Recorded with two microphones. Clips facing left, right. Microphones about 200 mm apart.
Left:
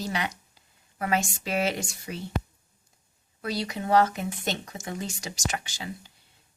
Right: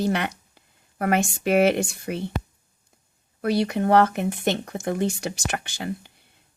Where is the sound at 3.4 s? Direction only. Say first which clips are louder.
Right 9 dB; 60° right (ahead or behind).